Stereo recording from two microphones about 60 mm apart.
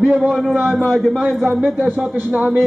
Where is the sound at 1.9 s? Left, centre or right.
Centre.